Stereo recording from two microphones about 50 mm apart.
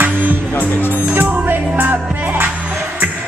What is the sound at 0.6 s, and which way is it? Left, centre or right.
Speech, left.